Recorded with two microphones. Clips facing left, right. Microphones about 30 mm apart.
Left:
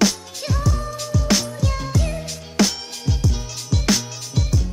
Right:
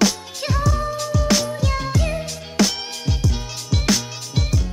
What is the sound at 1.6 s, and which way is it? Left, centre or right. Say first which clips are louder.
Music: right 2 dB; centre.